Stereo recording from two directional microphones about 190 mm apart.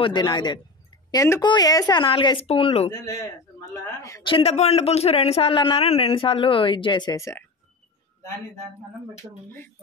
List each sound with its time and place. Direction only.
0.0 s a man's voice: 25° left (ahead or behind)
2.9 s a man's voice: 20° left (ahead or behind)
4.3 s a man's voice: 30° left (ahead or behind); by 7.4 s 15° left (ahead or behind)
9.2 s speech: 10° right (ahead or behind)